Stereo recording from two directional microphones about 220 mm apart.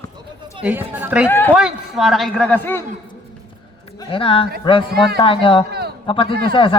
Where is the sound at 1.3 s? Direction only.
10° left (ahead or behind).